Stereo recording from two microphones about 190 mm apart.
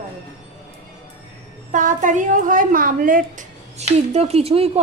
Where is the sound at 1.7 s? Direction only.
40° right (ahead or behind).